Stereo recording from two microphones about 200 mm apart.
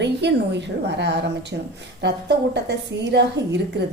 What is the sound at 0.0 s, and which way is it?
A woman's voice, 60° right (ahead or behind).